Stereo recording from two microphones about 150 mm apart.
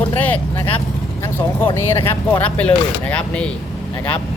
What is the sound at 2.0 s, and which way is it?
Speech, 15° left (ahead or behind).